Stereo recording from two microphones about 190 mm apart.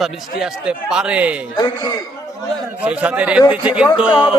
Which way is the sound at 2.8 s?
5° right (ahead or behind).